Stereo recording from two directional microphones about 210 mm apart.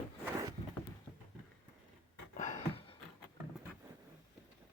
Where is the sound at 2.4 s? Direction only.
25° left (ahead or behind).